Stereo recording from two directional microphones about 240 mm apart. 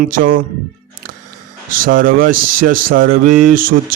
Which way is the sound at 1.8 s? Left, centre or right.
Right.